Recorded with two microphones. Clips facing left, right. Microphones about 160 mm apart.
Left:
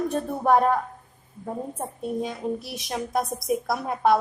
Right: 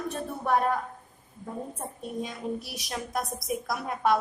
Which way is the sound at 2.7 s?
25° left (ahead or behind).